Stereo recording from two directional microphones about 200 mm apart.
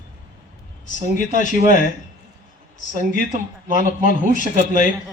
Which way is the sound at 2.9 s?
40° right (ahead or behind).